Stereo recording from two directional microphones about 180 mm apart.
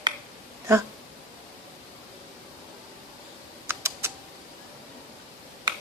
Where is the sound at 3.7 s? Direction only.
15° right (ahead or behind).